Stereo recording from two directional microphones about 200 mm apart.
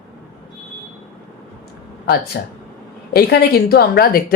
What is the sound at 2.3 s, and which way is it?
Speech, 55° left (ahead or behind).